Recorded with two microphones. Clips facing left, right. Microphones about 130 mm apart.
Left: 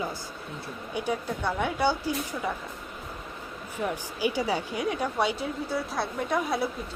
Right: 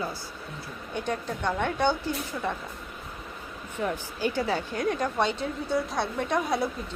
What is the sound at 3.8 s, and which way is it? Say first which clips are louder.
A woman's voice: even; 10° left (ahead or behind).